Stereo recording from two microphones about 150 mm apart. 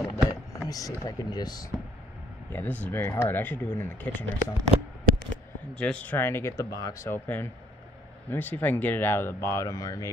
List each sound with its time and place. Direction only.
0.0 s vehicle: 25° left (ahead or behind)
0.7 s speech: 25° left (ahead or behind)
2.5 s speech: 10° left (ahead or behind)
5.8 s speech: 5° left (ahead or behind)